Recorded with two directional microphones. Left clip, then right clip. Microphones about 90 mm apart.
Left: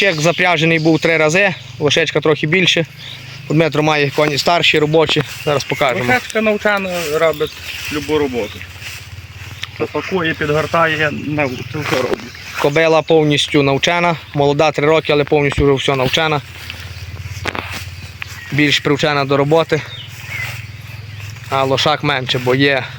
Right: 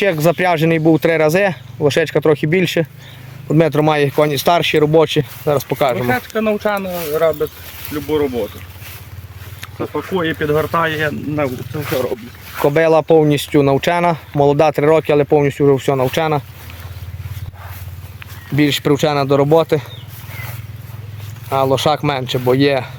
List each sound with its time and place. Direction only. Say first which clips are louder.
0.0 s speech: left 1 dB; 30° right (ahead or behind)
6.0 s speech: left 3 dB; 20° left (ahead or behind); by 7.5 s 50° left (ahead or behind)
7.9 s speech: even; 75° left (ahead or behind)
10.0 s speech: even; 75° left (ahead or behind)
11.5 s speech: left 2 dB; 40° left (ahead or behind)
12.6 s speech: even; 25° right (ahead or behind)
18.5 s speech: left 1 dB; 30° right (ahead or behind)
21.5 s speech: even; 30° right (ahead or behind)